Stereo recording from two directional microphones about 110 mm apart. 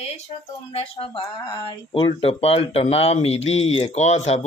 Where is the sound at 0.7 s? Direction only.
60° left (ahead or behind).